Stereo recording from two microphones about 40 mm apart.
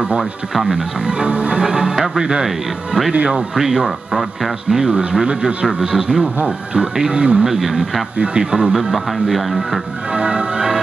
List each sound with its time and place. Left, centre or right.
0.2 s speech: centre
1.0 s speech: right
2.0 s speech: centre
4.8 s speech: centre
7.4 s speech: centre
8.2 s speech: right
8.7 s speech: centre
10.1 s music: right